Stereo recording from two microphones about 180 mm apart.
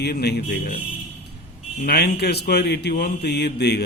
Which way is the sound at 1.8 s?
65° left (ahead or behind).